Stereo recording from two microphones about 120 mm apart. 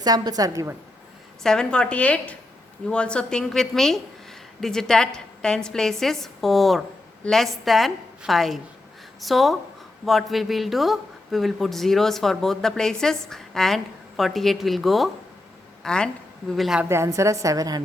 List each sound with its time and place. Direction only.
0.0 s a woman's voice: 35° right (ahead or behind)
1.5 s a woman's voice: 5° left (ahead or behind)
16.9 s a woman's voice: 25° right (ahead or behind)